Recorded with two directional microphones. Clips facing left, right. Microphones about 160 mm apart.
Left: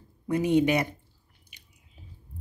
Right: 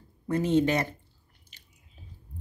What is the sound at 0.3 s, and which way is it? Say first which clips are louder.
Speech: left 1 dB; 15° left (ahead or behind).